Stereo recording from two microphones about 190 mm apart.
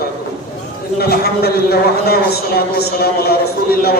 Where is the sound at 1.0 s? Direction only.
55° left (ahead or behind).